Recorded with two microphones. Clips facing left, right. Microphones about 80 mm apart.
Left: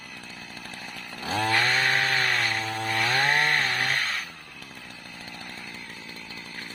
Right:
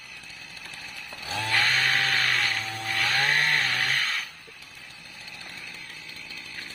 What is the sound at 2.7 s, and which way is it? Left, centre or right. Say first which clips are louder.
Chainsaw: left 4 dB; left.